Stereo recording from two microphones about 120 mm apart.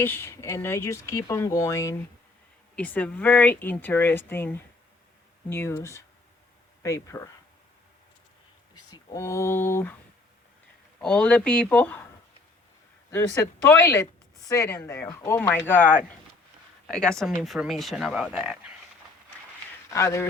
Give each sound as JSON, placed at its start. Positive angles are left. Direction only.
{"t": 0.0, "sound": "speech", "side_deg": 20}
{"t": 2.7, "sound": "speech", "side_deg": 15}
{"t": 8.7, "sound": "speech", "side_deg": 30}
{"t": 11.0, "sound": "speech", "side_deg": 10}
{"t": 13.7, "sound": "speech", "side_deg": 25}
{"t": 19.9, "sound": "speech", "side_deg": 25}